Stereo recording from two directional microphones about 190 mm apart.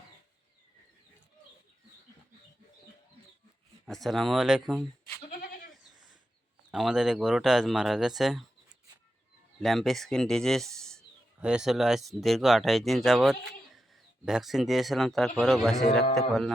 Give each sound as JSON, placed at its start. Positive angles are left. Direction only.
{"t": 3.8, "sound": "speech", "side_deg": 0}
{"t": 5.4, "sound": "goat", "side_deg": 45}
{"t": 6.7, "sound": "speech", "side_deg": -5}
{"t": 9.6, "sound": "speech", "side_deg": 0}